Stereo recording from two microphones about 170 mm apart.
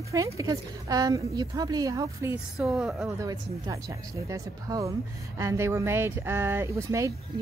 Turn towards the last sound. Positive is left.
turn(degrees=-20)  # may be behind; listen again after turning